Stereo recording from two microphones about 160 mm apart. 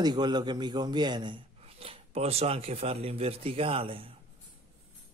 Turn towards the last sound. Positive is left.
turn(degrees=-35)  # may be behind; listen again after turning